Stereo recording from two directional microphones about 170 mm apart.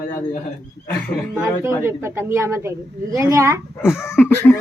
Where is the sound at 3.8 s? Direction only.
15° left (ahead or behind).